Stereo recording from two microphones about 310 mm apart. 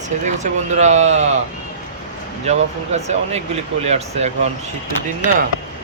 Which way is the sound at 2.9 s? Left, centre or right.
Right.